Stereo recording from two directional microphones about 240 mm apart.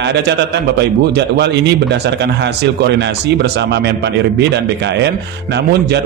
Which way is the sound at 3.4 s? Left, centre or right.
Right.